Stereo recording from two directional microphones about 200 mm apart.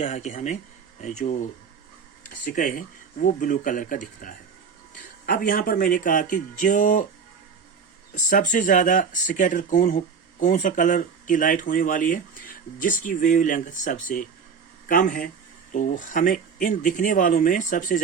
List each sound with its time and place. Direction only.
0.0 s speech: 30° left (ahead or behind)
8.1 s speech: 40° left (ahead or behind)